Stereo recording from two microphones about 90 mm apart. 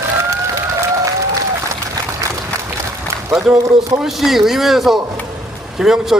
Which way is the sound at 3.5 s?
35° right (ahead or behind).